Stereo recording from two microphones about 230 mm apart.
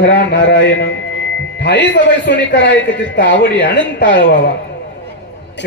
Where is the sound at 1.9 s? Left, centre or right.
Left.